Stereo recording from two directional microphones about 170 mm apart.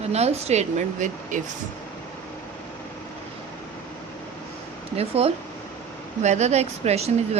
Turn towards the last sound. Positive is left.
turn(degrees=-40)  # may be behind; listen again after turning